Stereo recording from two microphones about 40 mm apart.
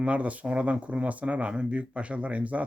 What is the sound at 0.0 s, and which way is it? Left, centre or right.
Speech, right.